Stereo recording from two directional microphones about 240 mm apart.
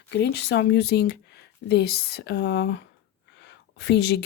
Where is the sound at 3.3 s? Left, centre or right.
Left.